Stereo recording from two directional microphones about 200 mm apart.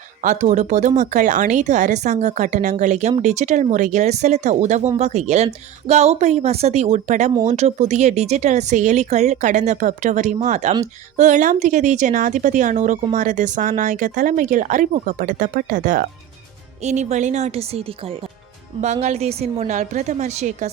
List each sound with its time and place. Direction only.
0.2 s speech: 40° right (ahead or behind)